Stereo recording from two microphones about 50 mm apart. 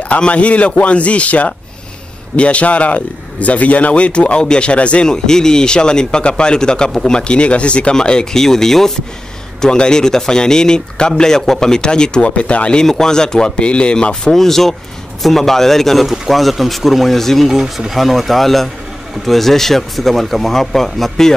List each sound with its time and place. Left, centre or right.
0.1 s a man's voice: left
5.0 s speech: centre
12.8 s speech: centre
14.3 s speech: centre
17.5 s speech: centre